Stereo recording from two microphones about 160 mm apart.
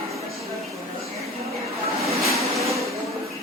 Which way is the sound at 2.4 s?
Centre (ahead or behind).